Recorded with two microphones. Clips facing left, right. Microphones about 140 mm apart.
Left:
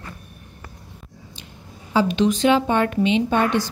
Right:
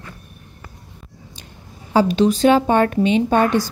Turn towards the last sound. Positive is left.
turn(degrees=-45)  # may be behind; listen again after turning